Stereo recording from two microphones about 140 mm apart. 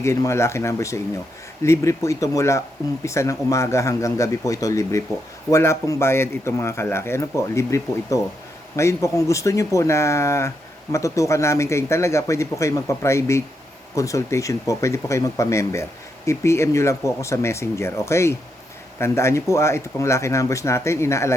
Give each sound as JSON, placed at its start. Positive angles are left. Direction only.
{"t": 0.0, "sound": "speech", "side_deg": 20}